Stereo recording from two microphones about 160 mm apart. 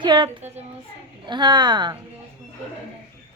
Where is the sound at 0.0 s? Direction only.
30° right (ahead or behind).